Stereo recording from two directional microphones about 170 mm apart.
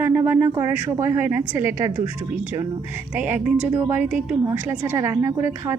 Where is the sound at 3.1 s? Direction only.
10° right (ahead or behind).